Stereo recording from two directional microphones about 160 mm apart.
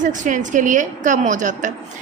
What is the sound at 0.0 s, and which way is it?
A woman's voice, 55° right (ahead or behind).